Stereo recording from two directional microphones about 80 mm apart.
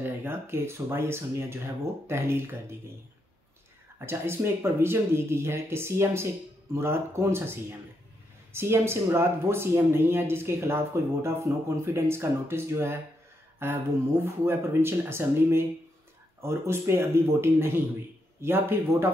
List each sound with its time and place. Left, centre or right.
0.0 s speech: right
4.0 s speech: right
8.5 s speech: right